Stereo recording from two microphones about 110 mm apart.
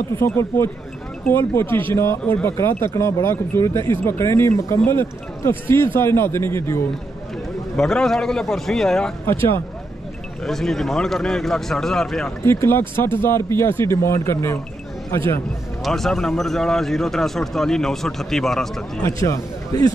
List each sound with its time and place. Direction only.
0.1 s speech: 25° left (ahead or behind)
7.7 s speech: 5° left (ahead or behind)
9.2 s speech: 25° left (ahead or behind)
10.4 s speech: 5° left (ahead or behind)
12.4 s speech: 25° left (ahead or behind)
15.8 s speech: 5° left (ahead or behind)
19.0 s speech: 30° left (ahead or behind)